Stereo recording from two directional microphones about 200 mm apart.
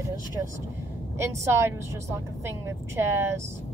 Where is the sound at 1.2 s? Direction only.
15° right (ahead or behind).